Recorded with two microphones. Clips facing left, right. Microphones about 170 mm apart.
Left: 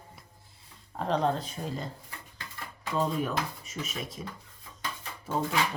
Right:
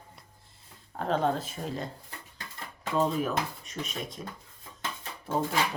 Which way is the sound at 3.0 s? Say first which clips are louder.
Right 2 dB; centre (ahead or behind).